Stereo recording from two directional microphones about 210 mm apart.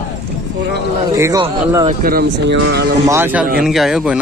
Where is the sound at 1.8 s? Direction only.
45° right (ahead or behind).